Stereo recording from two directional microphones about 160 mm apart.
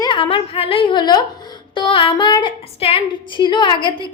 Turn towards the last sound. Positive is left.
turn(degrees=30)  # may be behind; listen again after turning